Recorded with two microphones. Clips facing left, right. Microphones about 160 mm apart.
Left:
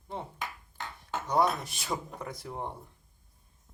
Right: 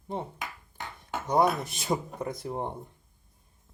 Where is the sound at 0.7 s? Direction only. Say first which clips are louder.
Right 1 dB; 15° right (ahead or behind).